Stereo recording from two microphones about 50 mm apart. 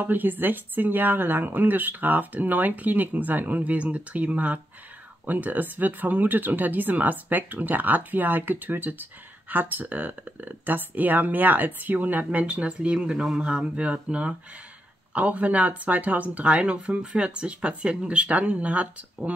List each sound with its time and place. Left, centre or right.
0.0 s speech: right